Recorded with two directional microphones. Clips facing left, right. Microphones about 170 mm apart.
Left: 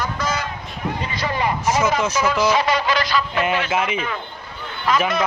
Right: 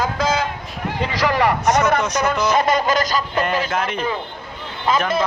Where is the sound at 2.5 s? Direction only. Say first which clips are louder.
Right 2 dB; 50° right (ahead or behind).